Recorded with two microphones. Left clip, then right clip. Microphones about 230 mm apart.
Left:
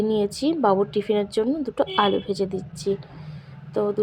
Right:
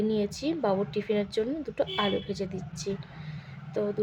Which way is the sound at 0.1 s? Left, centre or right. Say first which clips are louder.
Left 7 dB; centre.